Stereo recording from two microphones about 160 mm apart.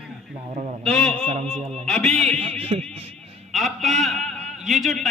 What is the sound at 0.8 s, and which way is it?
Speech, 5° left (ahead or behind).